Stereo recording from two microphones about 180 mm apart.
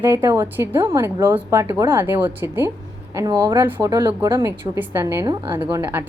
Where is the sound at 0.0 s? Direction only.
15° right (ahead or behind).